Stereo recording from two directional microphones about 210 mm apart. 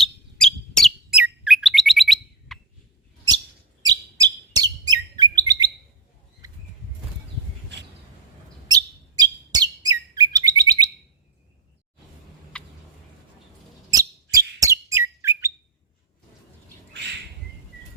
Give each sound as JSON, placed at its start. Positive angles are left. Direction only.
{"t": 0.0, "sound": "bird", "side_deg": 5}
{"t": 3.8, "sound": "chirp", "side_deg": -20}
{"t": 6.4, "sound": "a sound", "side_deg": -15}
{"t": 8.6, "sound": "bird", "side_deg": -20}
{"t": 12.5, "sound": "a sound", "side_deg": 5}
{"t": 13.9, "sound": "bird", "side_deg": -15}